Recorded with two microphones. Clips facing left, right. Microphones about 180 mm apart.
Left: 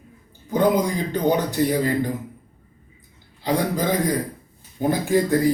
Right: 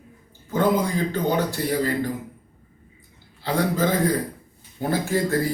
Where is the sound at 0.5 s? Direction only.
15° left (ahead or behind).